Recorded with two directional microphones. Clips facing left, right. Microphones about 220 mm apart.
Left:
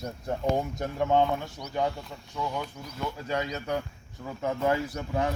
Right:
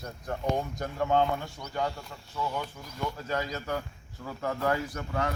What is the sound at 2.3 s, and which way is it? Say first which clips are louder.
Speech: left 1 dB; 10° left (ahead or behind).